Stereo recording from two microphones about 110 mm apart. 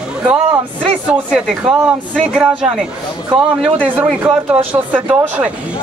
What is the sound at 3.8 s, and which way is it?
Speech, 15° right (ahead or behind).